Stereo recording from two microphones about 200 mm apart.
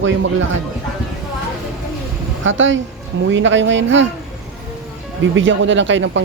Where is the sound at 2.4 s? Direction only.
70° right (ahead or behind).